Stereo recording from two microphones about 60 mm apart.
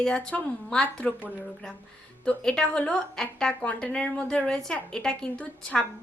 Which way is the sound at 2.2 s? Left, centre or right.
Centre.